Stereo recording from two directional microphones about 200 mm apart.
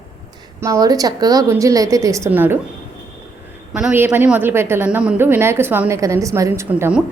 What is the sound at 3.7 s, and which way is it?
A woman's voice, 5° right (ahead or behind).